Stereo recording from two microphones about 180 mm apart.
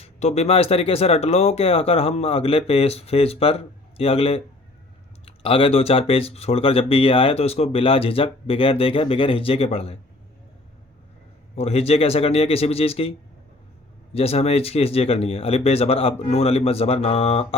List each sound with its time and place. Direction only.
0.0 s speech: 35° left (ahead or behind)
11.5 s speech: 35° left (ahead or behind)